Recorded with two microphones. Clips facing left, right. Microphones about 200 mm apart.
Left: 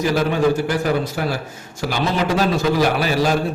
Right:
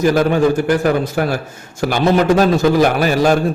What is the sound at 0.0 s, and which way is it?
A man's voice, 50° right (ahead or behind).